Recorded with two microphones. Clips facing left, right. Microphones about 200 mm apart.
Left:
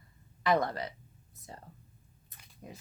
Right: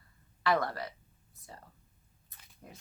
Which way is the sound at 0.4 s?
20° left (ahead or behind).